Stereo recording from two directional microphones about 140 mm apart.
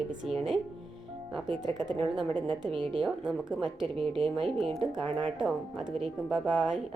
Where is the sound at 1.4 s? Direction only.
30° right (ahead or behind).